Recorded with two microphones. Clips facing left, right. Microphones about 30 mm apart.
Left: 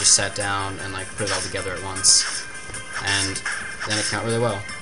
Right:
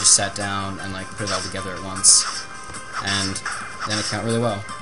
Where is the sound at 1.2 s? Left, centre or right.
Left.